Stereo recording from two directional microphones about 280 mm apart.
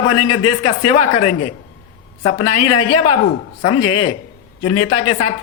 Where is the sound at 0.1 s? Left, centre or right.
Left.